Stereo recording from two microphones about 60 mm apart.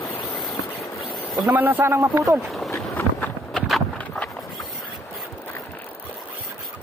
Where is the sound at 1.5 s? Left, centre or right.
Right.